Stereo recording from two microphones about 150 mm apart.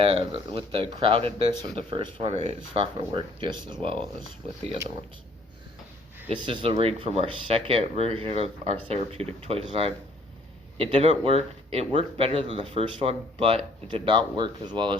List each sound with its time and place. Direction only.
0.0 s speech: 35° right (ahead or behind)
6.2 s speech: 35° right (ahead or behind)